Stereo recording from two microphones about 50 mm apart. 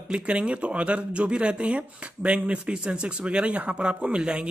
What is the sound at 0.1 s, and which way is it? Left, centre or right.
Speech, right.